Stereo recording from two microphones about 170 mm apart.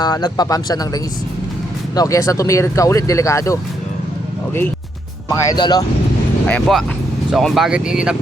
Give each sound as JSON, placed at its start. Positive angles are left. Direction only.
{"t": 0.0, "sound": "speech", "side_deg": 25}
{"t": 2.0, "sound": "speech", "side_deg": 20}
{"t": 5.5, "sound": "speech", "side_deg": 25}
{"t": 6.5, "sound": "speech", "side_deg": 0}